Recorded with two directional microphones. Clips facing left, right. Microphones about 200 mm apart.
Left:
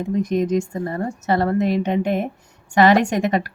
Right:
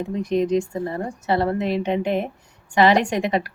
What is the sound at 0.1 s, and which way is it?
Speech, 45° left (ahead or behind).